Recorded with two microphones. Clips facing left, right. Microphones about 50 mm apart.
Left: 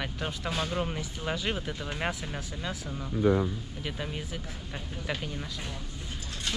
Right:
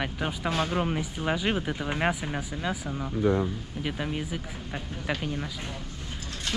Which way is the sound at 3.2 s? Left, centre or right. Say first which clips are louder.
Even; centre.